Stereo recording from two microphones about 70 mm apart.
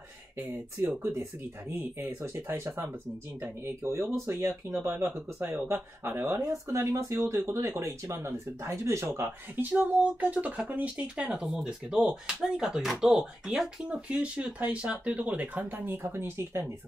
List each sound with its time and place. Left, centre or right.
1.7 s speech: right
9.6 s speech: right